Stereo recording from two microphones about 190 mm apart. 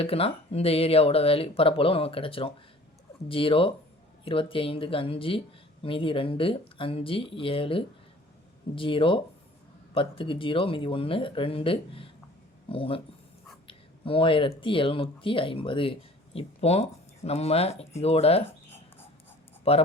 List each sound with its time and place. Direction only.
0.0 s speech: 30° left (ahead or behind)
19.7 s speech: 30° left (ahead or behind)